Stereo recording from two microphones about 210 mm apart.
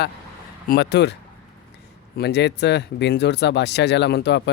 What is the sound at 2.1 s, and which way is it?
Speech, 55° left (ahead or behind).